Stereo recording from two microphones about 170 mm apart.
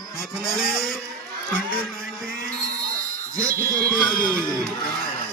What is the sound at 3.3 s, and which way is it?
Speech, 20° right (ahead or behind).